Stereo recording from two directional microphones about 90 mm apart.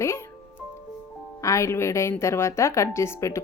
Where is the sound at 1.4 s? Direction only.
35° left (ahead or behind).